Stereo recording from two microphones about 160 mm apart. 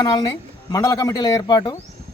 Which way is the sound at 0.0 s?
25° left (ahead or behind).